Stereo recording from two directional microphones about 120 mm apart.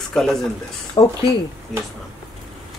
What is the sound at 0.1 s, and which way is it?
Speech, 5° left (ahead or behind).